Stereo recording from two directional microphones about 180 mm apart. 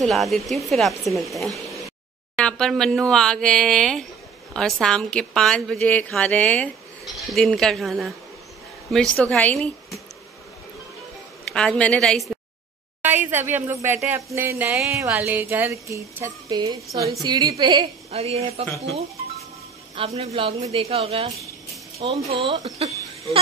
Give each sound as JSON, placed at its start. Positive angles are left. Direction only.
{"t": 0.0, "sound": "a woman's voice", "side_deg": 0}
{"t": 11.5, "sound": "a woman's voice", "side_deg": 5}
{"t": 13.0, "sound": "a woman's voice", "side_deg": -10}
{"t": 20.0, "sound": "a woman's voice", "side_deg": -30}